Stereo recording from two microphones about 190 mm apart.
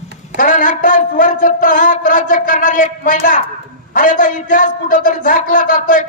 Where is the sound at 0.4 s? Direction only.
45° left (ahead or behind).